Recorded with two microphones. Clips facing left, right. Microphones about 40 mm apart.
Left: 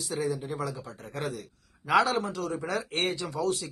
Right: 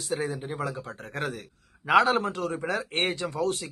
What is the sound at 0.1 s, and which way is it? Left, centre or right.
Speech, right.